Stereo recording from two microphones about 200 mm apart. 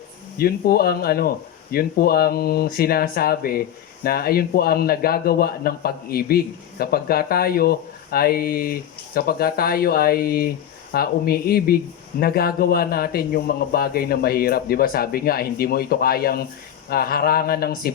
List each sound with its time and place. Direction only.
0.3 s a man's voice: 50° left (ahead or behind)